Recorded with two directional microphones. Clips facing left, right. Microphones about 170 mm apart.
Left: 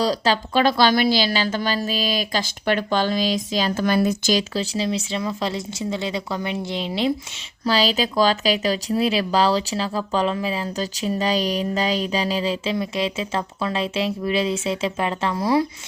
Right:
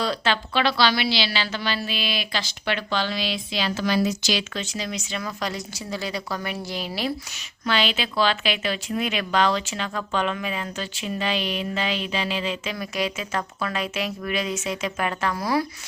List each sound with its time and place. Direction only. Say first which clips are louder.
0.0 s a woman's voice: left 4 dB; 35° left (ahead or behind)
7.6 s a woman's voice: left 4 dB; 35° left (ahead or behind)